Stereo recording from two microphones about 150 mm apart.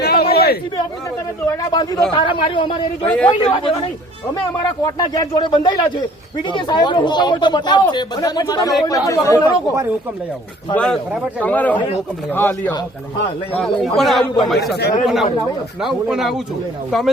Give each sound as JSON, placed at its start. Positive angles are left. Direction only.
{"t": 0.0, "sound": "chatter", "side_deg": 90}
{"t": 1.7, "sound": "speech", "side_deg": 25}
{"t": 3.0, "sound": "a man's voice", "side_deg": 10}
{"t": 3.2, "sound": "speech", "side_deg": 30}
{"t": 10.8, "sound": "a man's voice", "side_deg": 5}
{"t": 13.6, "sound": "a man's voice", "side_deg": 0}
{"t": 14.8, "sound": "speech", "side_deg": 90}
{"t": 15.0, "sound": "a man's voice", "side_deg": 0}